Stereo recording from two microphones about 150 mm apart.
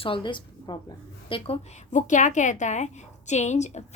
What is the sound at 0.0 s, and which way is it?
A woman's voice, 35° left (ahead or behind).